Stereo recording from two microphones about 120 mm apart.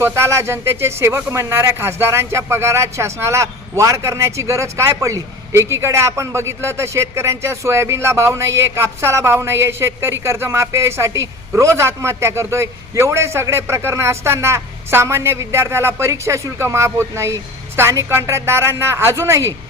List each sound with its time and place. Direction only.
0.0 s speech: 25° right (ahead or behind)